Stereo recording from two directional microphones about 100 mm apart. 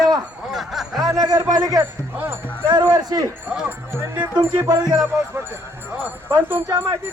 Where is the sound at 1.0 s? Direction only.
35° right (ahead or behind).